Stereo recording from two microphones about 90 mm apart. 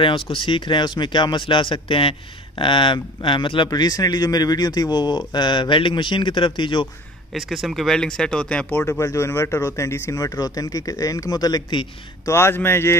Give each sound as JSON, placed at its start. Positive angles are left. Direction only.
{"t": 0.3, "sound": "speech", "side_deg": 65}
{"t": 7.3, "sound": "speech", "side_deg": 0}
{"t": 12.3, "sound": "speech", "side_deg": 25}